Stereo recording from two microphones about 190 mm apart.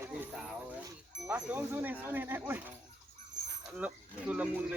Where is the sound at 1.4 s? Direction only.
10° right (ahead or behind).